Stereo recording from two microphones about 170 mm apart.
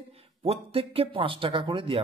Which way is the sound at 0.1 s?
35° right (ahead or behind).